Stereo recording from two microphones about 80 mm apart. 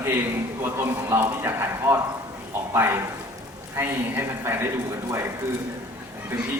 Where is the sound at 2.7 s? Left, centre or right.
Right.